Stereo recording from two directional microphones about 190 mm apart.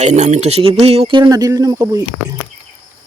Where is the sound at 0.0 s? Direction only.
35° right (ahead or behind); by 2.0 s 20° right (ahead or behind).